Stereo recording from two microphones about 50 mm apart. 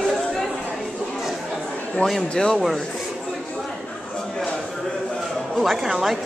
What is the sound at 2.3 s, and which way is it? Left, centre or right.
Speech, centre.